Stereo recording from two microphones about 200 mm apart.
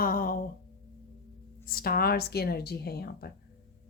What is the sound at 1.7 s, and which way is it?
Speech, 50° left (ahead or behind).